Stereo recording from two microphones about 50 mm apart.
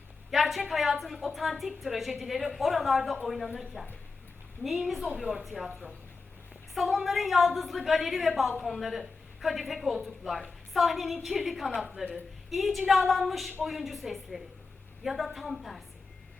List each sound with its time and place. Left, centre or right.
0.3 s a sound: centre
0.6 s a woman's voice: centre
6.7 s a woman's voice: centre